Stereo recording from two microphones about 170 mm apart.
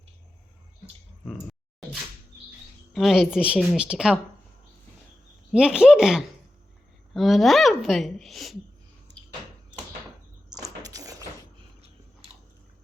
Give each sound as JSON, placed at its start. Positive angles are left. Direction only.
{"t": 2.9, "sound": "a woman's voice", "side_deg": 0}
{"t": 5.5, "sound": "a woman's voice", "side_deg": -5}
{"t": 10.8, "sound": "a sound", "side_deg": -20}